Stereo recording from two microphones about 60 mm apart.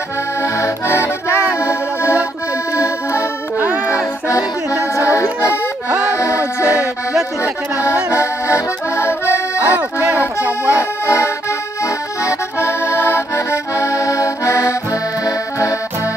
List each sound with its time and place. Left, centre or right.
0.4 s accordion: left
3.5 s music: right
3.9 s music: left
5.0 s accordion: left
6.1 s music: left
7.8 s accordion: left
9.7 s music: right
10.4 s accordion: right
10.8 s accordion: left